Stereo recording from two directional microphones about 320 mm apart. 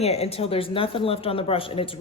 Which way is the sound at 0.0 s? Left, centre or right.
Centre.